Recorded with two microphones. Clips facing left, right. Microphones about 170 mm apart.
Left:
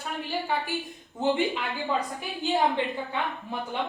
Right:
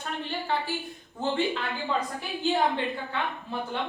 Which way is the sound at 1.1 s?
15° left (ahead or behind).